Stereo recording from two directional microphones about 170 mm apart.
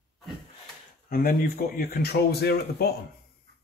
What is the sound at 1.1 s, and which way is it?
A man's voice, 65° left (ahead or behind).